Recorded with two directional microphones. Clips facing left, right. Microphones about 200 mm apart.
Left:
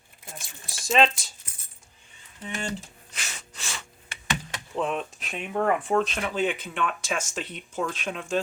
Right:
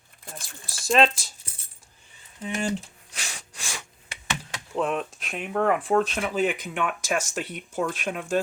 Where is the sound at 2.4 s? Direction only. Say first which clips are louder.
Right 5 dB; 10° right (ahead or behind).